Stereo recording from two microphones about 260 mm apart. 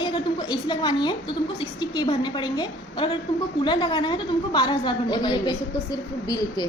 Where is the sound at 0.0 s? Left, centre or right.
Centre.